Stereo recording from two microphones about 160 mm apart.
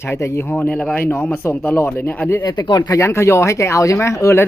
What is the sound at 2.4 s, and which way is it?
Speech, 25° left (ahead or behind).